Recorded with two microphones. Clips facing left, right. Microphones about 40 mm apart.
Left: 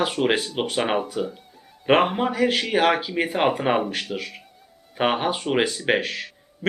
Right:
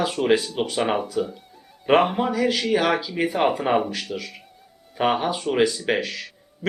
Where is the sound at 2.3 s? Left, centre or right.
Left.